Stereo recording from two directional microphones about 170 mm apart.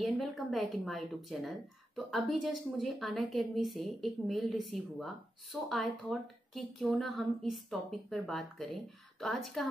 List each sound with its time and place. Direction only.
0.0 s speech: centre (ahead or behind)